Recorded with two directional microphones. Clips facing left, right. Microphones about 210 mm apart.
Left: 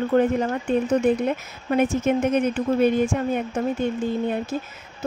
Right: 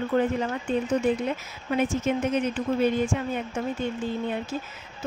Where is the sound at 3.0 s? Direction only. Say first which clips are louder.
Left 5 dB; 40° left (ahead or behind).